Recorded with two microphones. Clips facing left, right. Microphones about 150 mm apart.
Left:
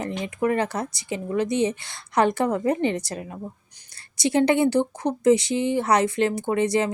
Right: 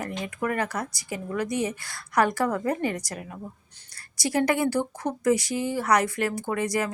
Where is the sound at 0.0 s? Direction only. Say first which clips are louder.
Left 5 dB; 20° left (ahead or behind).